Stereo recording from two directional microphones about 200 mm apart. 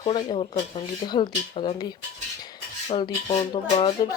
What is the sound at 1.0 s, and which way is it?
Speech, 20° left (ahead or behind).